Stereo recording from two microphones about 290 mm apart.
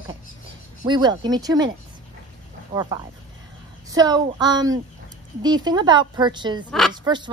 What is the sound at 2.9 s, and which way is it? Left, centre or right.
Speech, centre.